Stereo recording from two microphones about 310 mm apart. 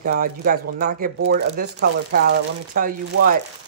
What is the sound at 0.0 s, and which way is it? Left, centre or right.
Speech, right.